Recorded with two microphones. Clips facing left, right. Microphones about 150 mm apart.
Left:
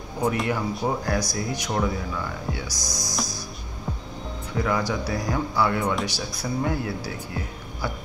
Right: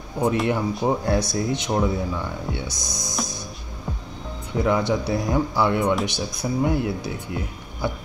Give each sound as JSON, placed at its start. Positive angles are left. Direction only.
{"t": 0.5, "sound": "speech", "side_deg": -25}
{"t": 4.6, "sound": "speech", "side_deg": -20}